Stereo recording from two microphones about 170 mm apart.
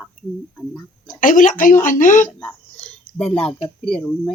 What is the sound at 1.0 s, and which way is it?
Speech, 50° left (ahead or behind).